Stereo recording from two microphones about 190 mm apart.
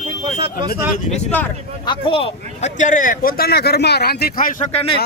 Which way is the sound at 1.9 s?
30° left (ahead or behind).